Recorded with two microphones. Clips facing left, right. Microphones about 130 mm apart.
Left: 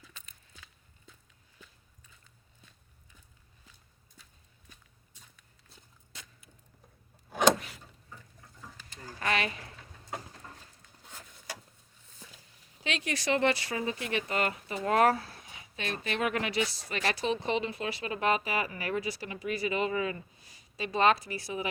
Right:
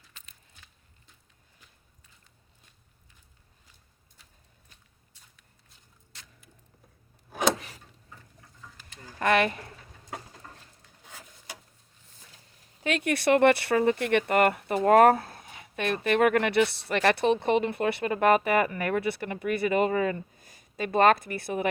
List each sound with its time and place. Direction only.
9.1 s speech: 55° right (ahead or behind)
12.8 s speech: 55° right (ahead or behind)